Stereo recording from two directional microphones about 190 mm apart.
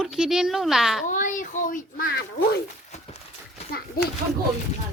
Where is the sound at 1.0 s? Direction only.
40° left (ahead or behind).